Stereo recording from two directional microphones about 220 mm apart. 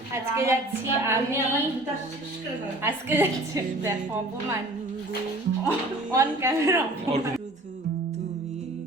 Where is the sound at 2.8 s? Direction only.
10° right (ahead or behind).